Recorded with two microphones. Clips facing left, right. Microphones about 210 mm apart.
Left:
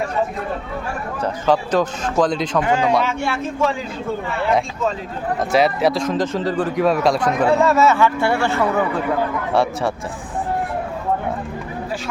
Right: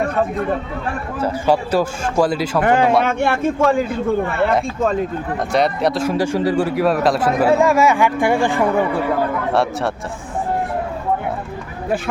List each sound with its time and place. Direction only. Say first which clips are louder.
1.2 s speech: right 1 dB; 10° right (ahead or behind)
2.6 s a man's voice: right 3 dB; 55° right (ahead or behind)
5.5 s speech: left 1 dB; centre (ahead or behind); by 8.7 s 15° right (ahead or behind)
9.5 s speech: left 2 dB; centre (ahead or behind)